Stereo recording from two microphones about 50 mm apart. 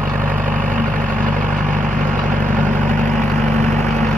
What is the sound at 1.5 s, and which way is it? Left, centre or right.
Vehicle, left.